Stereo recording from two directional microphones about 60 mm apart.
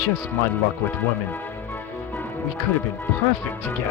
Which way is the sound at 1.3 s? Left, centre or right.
Left.